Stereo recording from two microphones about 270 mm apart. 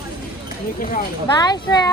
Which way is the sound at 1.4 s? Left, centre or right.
Centre.